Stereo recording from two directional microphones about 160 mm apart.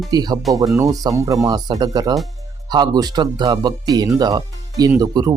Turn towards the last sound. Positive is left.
turn(degrees=-25)  # may be behind; listen again after turning